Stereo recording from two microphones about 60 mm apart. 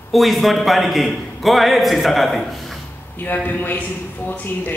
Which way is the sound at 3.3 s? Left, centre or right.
Left.